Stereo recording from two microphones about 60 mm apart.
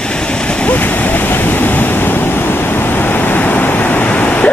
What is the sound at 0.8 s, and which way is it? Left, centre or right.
Waves, left.